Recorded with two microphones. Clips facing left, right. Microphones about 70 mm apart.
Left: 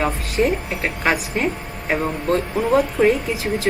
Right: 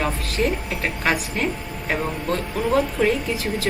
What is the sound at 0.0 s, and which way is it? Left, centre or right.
A woman's voice, centre.